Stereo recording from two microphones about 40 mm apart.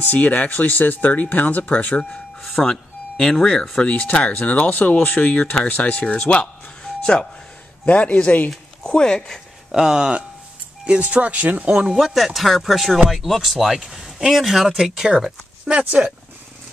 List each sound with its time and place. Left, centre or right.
0.0 s speech: left
2.4 s speech: centre
4.0 s speech: left
4.5 s speech: left
5.2 s a man's voice: left
7.8 s a man's voice: left
8.8 s speech: left
9.7 s speech: centre
10.9 s speech: right
11.9 s speech: centre
13.7 s speech: centre
14.0 s a sound: centre
14.4 s speech: centre